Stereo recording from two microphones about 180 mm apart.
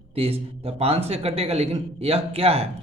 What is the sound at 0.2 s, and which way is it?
A man's voice, 35° right (ahead or behind).